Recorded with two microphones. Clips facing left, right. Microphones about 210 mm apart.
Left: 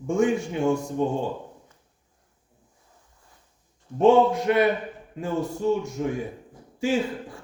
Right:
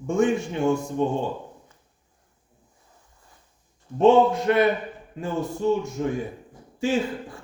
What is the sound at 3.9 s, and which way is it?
A man's voice, 10° left (ahead or behind).